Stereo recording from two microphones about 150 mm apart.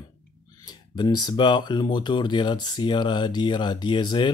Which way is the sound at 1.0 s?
30° left (ahead or behind).